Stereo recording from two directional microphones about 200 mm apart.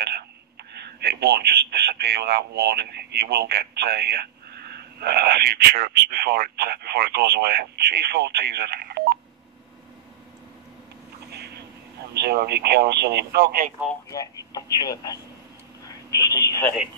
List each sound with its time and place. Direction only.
0.9 s speech: 55° right (ahead or behind)
11.2 s vehicle: 55° right (ahead or behind)
12.1 s speech: 55° right (ahead or behind)
14.0 s speech: 15° left (ahead or behind)